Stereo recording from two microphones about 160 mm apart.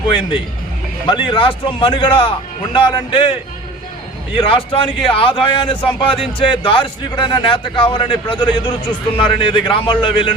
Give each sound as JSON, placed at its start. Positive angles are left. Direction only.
{"t": 1.0, "sound": "a man's voice", "side_deg": 30}
{"t": 4.4, "sound": "a man's voice", "side_deg": 30}